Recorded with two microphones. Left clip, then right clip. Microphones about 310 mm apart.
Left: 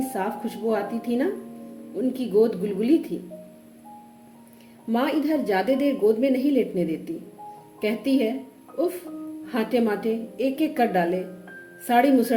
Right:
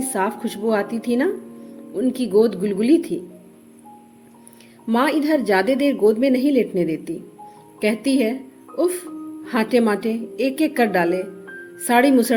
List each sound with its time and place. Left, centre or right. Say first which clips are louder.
0.1 s a woman's voice: right 5 dB; right
4.9 s a woman's voice: right 5 dB; right
9.5 s a woman's voice: right 5 dB; right